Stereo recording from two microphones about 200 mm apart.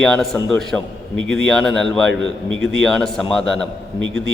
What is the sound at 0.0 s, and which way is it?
Speech, 5° left (ahead or behind).